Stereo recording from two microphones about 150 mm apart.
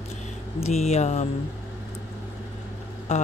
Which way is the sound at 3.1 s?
50° left (ahead or behind).